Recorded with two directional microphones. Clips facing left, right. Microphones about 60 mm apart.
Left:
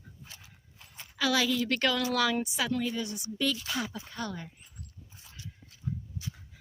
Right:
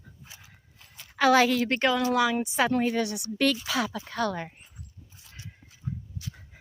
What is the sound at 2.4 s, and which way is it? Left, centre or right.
Speech, right.